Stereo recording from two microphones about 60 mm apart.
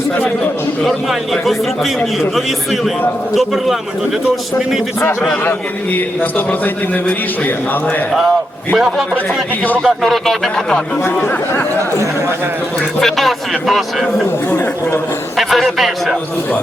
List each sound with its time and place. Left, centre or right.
0.9 s speech: centre
3.3 s speech: centre
5.5 s a man's voice: left
8.7 s speech: centre
11.2 s speech: left
13.0 s speech: centre
14.5 s speech: left
15.4 s speech: centre